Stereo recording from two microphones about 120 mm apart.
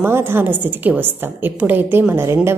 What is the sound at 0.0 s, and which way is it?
A woman's voice, 20° right (ahead or behind).